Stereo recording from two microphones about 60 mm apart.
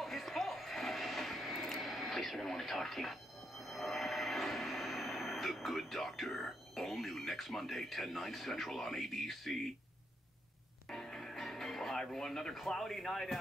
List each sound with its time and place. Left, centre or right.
0.0 s television: centre
10.9 s music: centre